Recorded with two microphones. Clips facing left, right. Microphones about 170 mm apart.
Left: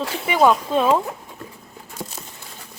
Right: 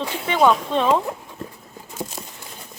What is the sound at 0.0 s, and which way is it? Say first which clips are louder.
Speech: left 1 dB; 5° left (ahead or behind).